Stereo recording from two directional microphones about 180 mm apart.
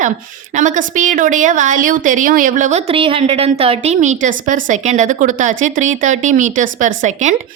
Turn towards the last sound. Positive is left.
turn(degrees=-40)  # may be behind; listen again after turning